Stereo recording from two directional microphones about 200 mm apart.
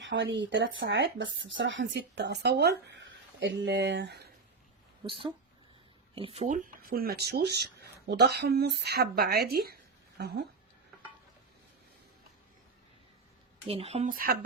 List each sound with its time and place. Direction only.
0.0 s speech: 65° right (ahead or behind)
5.0 s speech: 25° right (ahead or behind); by 10.4 s 55° right (ahead or behind)
13.7 s speech: 30° right (ahead or behind)
14.1 s speech: 45° right (ahead or behind)